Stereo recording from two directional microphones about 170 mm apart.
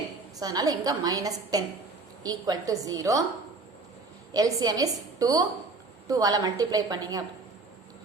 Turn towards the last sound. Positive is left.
turn(degrees=-20)  # may be behind; listen again after turning